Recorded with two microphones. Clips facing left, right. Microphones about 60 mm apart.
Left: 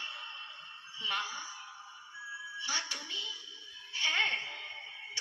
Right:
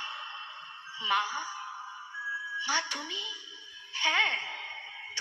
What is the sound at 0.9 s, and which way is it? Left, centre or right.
Music, right.